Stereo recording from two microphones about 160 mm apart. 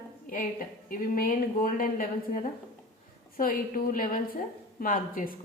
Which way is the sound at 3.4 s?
60° left (ahead or behind).